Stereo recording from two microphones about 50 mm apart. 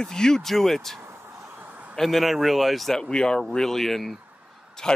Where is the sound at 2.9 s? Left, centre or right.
Centre.